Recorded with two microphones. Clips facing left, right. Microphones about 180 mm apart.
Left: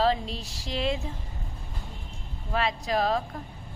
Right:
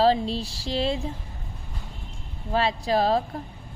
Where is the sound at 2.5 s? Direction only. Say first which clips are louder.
Right 4 dB; 30° right (ahead or behind).